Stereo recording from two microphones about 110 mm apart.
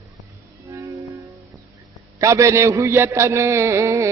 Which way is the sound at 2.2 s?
30° right (ahead or behind).